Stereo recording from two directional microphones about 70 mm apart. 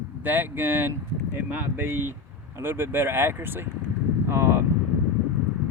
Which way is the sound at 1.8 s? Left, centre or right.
Right.